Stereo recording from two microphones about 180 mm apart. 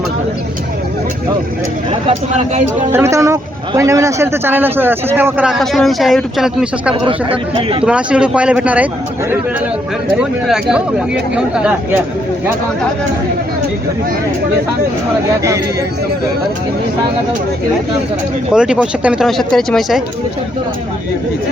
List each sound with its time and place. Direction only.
1.9 s speech: 30° right (ahead or behind)
2.9 s a man's voice: 15° right (ahead or behind)
7.1 s speech: 30° right (ahead or behind)
7.9 s speech: 5° right (ahead or behind)
10.2 s speech: 5° right (ahead or behind)
18.5 s speech: 5° right (ahead or behind)